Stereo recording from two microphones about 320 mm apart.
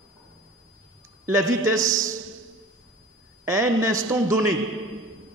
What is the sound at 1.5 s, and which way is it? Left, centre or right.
Speech, centre.